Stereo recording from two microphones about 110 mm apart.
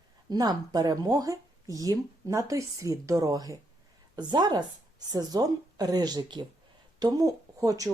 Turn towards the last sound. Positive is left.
turn(degrees=-30)  # may be behind; listen again after turning